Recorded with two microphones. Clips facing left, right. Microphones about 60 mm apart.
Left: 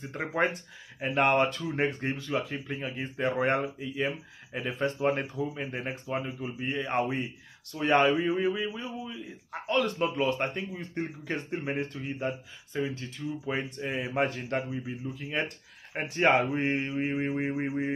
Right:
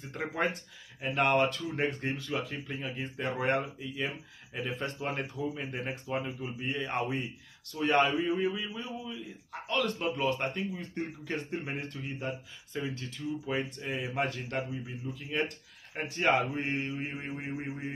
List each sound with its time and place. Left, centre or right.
0.1 s a man's voice: left
15.9 s a man's voice: left